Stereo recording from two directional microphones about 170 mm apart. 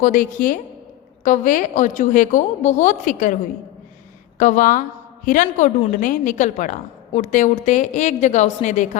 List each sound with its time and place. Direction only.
0.0 s a woman's voice: 50° left (ahead or behind)
4.4 s a woman's voice: 50° left (ahead or behind)